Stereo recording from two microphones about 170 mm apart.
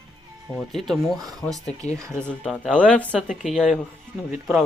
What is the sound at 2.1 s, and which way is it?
Speech, 5° left (ahead or behind).